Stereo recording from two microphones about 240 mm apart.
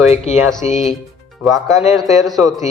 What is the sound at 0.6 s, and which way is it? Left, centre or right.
Speech, left.